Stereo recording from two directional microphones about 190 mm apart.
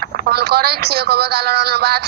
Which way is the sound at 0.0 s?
55° right (ahead or behind).